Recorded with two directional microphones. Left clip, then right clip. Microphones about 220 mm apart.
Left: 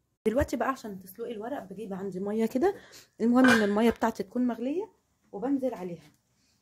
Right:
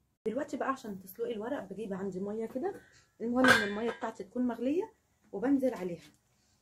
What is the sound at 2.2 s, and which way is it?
Speech, 40° left (ahead or behind).